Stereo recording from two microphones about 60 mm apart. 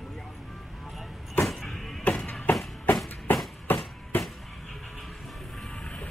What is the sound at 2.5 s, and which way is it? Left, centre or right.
Music, left.